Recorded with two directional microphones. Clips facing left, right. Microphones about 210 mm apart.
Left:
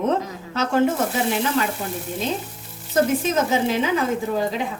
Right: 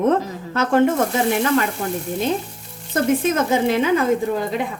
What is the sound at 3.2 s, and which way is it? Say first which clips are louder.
Speech: right 2 dB; 55° right (ahead or behind).